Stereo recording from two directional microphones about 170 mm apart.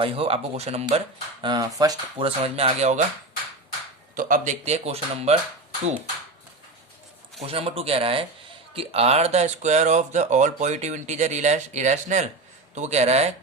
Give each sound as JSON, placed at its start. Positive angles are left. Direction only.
{"t": 0.0, "sound": "speech", "side_deg": -35}
{"t": 2.2, "sound": "speech", "side_deg": -35}
{"t": 4.1, "sound": "speech", "side_deg": -50}
{"t": 7.4, "sound": "speech", "side_deg": -35}